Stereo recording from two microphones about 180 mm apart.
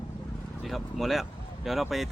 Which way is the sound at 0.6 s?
Centre (ahead or behind).